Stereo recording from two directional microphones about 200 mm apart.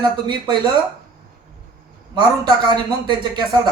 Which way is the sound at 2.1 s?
20° right (ahead or behind).